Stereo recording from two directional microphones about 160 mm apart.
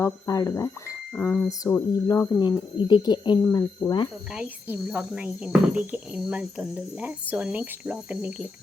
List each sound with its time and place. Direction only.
0.0 s speech: 20° left (ahead or behind)
2.4 s speech: 30° left (ahead or behind)
4.3 s speech: 10° right (ahead or behind)